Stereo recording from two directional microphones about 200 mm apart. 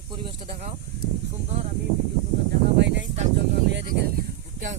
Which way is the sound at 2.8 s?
60° right (ahead or behind).